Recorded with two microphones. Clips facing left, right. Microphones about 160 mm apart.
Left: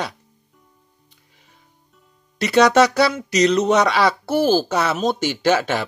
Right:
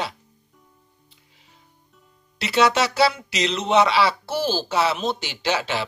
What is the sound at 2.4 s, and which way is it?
Speech, 50° left (ahead or behind).